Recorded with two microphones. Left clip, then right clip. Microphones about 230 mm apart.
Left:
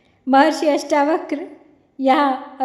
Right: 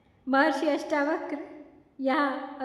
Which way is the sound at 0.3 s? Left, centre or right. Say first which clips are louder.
Left 10 dB; left.